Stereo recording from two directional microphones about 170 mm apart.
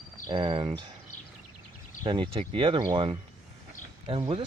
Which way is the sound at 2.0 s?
30° right (ahead or behind).